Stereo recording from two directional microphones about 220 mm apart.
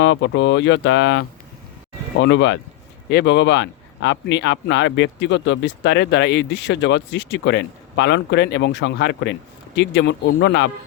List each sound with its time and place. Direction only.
0.0 s speech: 55° left (ahead or behind)
2.2 s a man's voice: 55° left (ahead or behind)